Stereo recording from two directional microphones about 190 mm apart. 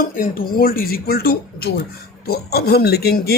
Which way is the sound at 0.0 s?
50° left (ahead or behind).